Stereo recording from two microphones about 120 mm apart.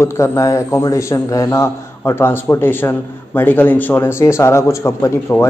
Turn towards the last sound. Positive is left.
turn(degrees=20)  # may be behind; listen again after turning